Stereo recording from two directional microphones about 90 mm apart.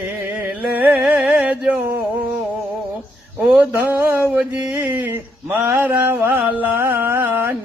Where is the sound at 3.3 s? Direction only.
15° right (ahead or behind).